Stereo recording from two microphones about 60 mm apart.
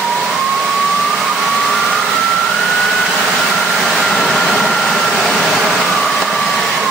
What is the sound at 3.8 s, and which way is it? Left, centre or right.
Vehicle, centre.